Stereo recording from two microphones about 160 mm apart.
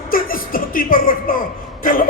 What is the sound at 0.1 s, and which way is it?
Music, 65° left (ahead or behind).